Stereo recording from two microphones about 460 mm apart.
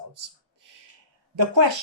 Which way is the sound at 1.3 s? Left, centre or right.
Right.